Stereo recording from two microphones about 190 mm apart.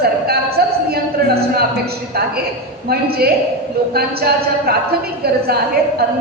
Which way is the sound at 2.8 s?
55° right (ahead or behind).